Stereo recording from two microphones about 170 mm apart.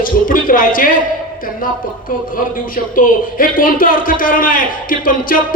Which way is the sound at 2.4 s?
55° left (ahead or behind).